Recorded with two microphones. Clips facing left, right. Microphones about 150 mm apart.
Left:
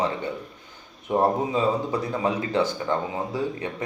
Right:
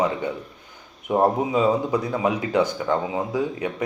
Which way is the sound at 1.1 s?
15° right (ahead or behind).